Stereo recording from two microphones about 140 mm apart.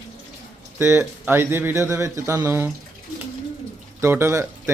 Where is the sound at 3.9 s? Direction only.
20° right (ahead or behind).